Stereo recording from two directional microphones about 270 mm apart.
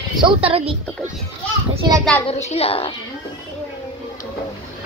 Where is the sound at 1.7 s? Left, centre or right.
Centre.